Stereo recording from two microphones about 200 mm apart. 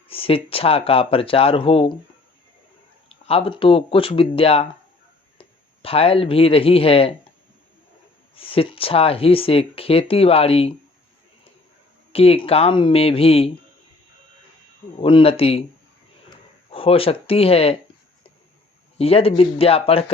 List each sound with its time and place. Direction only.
0.1 s speech: 30° left (ahead or behind)
3.1 s speech: 30° left (ahead or behind)
8.4 s speech: 25° left (ahead or behind)
12.1 s speech: 30° left (ahead or behind)
15.0 s speech: 25° left (ahead or behind)
16.6 s speech: 30° left (ahead or behind)
18.9 s speech: 30° left (ahead or behind)